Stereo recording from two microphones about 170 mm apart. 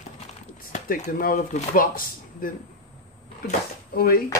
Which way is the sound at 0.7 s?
50° left (ahead or behind).